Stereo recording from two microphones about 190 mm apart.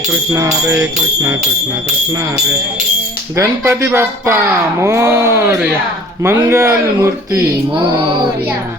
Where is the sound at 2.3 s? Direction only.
5° right (ahead or behind).